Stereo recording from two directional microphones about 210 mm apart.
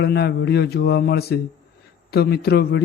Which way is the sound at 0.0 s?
50° left (ahead or behind).